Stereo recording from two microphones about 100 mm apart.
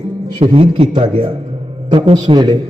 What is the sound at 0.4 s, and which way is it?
Speech, 65° right (ahead or behind).